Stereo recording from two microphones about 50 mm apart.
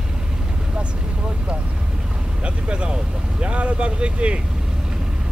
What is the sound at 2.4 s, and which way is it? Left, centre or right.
Vehicle, right.